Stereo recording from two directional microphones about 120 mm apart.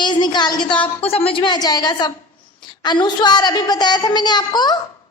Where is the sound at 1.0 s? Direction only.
55° left (ahead or behind).